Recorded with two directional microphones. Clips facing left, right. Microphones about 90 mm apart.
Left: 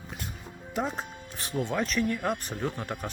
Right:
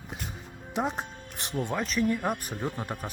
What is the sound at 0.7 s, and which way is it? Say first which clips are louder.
Music: right 1 dB; 15° right (ahead or behind).